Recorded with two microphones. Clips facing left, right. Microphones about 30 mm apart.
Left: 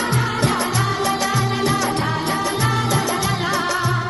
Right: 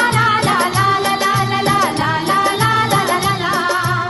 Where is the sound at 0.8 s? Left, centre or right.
Right.